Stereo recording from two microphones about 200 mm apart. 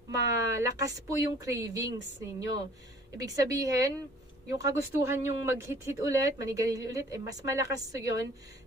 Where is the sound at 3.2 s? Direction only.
15° right (ahead or behind).